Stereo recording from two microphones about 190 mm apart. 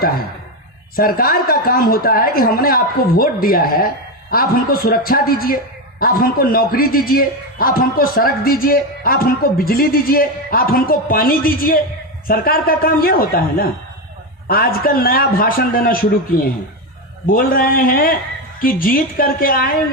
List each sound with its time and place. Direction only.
0.9 s a man's voice: 50° left (ahead or behind)
17.2 s a man's voice: 50° left (ahead or behind)